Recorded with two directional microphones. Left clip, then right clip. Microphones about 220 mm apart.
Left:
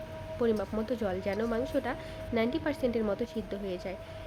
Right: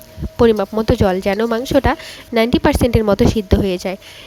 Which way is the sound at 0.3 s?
45° right (ahead or behind).